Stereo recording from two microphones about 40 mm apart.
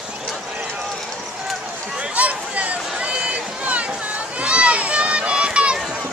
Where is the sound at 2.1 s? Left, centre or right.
Right.